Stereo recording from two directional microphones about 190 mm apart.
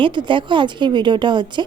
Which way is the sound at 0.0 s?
25° right (ahead or behind).